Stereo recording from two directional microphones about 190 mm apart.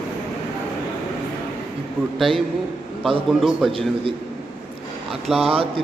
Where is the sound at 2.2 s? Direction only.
Centre (ahead or behind).